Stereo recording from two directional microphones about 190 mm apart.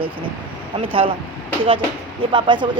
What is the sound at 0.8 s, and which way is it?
Speech, 30° right (ahead or behind).